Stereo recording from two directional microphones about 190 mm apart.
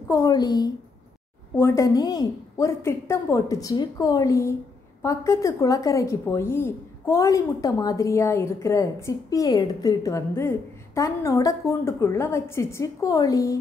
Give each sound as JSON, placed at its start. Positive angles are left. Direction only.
{"t": 0.1, "sound": "a woman's voice", "side_deg": 15}